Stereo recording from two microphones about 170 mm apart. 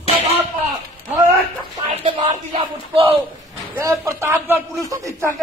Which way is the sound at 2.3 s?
35° right (ahead or behind).